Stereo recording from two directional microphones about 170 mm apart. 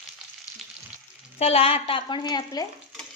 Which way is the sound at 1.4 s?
35° left (ahead or behind).